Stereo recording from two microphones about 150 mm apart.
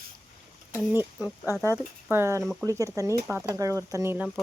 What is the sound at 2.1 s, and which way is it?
Speech, 15° right (ahead or behind).